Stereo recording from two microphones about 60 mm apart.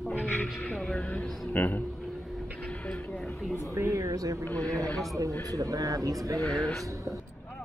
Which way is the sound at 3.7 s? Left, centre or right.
Right.